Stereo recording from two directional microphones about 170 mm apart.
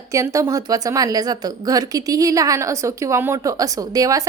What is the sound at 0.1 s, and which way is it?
A woman's voice, 20° right (ahead or behind).